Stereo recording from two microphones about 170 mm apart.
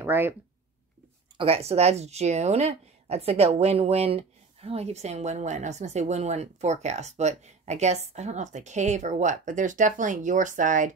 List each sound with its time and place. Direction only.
0.0 s speech: 10° right (ahead or behind)
1.4 s speech: 35° right (ahead or behind)